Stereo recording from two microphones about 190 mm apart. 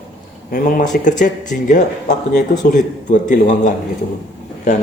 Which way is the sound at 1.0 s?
40° left (ahead or behind).